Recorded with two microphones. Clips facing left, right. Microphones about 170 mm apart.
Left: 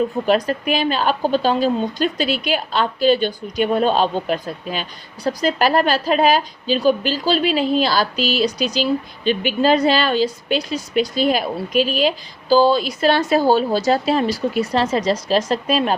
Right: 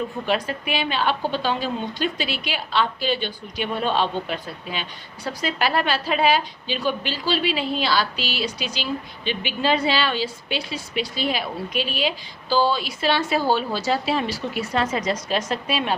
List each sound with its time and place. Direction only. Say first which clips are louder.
0.3 s a woman's voice: left 5 dB; 40° left (ahead or behind)